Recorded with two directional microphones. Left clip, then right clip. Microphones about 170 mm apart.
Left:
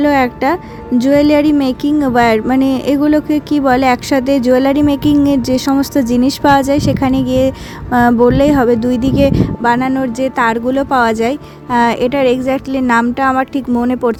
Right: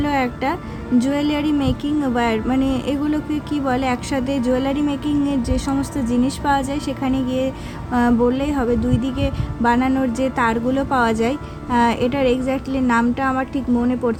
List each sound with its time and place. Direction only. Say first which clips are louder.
0.0 s a woman's voice: left 8 dB; 35° left (ahead or behind); by 14.2 s 50° left (ahead or behind)